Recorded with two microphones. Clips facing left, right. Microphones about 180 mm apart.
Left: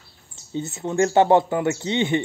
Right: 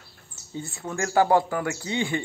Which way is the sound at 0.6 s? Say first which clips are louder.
Left 9 dB; 20° left (ahead or behind).